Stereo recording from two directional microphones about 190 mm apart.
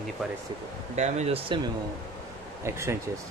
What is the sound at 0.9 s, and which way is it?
Speech, 35° right (ahead or behind).